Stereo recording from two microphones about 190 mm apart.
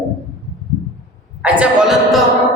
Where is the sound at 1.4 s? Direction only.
5° right (ahead or behind).